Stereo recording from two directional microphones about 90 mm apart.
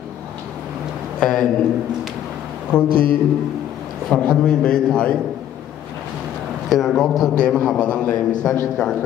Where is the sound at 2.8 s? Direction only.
75° right (ahead or behind).